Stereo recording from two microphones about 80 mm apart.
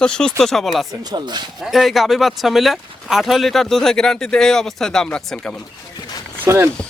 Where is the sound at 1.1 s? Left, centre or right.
Right.